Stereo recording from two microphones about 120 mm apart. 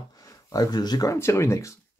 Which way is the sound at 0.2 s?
30° left (ahead or behind).